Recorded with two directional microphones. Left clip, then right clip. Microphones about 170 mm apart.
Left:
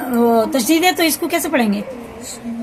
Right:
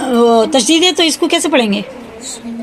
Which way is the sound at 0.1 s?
30° right (ahead or behind).